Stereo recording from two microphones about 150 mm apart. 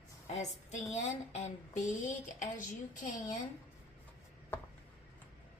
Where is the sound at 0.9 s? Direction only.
45° left (ahead or behind).